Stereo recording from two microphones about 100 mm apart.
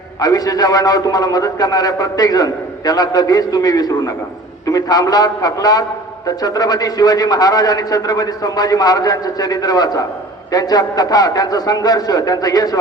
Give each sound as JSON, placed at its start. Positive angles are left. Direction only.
{"t": 0.2, "sound": "a man's voice", "side_deg": 40}